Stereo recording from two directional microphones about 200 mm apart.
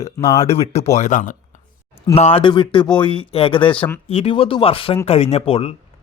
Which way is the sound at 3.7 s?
5° left (ahead or behind).